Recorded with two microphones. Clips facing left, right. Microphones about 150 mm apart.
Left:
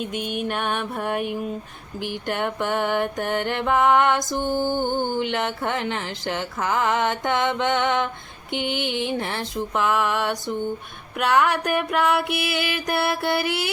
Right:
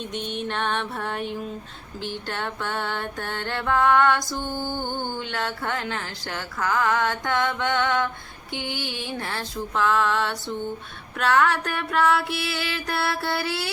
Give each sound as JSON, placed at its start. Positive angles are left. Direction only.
{"t": 0.0, "sound": "music", "side_deg": 10}